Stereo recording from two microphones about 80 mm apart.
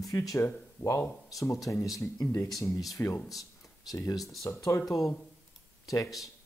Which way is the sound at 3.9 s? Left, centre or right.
Left.